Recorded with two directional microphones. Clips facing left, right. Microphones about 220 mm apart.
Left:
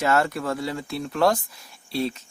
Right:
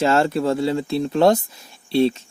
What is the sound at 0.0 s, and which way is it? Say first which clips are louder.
Speech: right 5 dB; 25° right (ahead or behind).